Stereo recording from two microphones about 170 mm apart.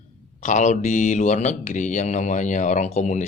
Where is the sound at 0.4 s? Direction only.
45° left (ahead or behind).